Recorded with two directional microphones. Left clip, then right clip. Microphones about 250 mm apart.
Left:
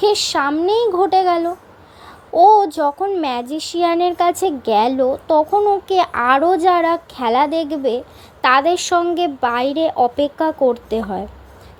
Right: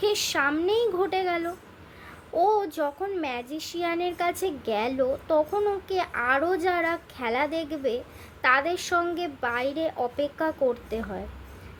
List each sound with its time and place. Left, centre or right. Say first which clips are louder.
0.0 s speech: left 9 dB; centre
2.6 s speech: left 12 dB; centre